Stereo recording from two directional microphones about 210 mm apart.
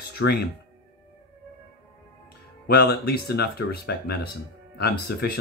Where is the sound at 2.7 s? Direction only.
50° left (ahead or behind).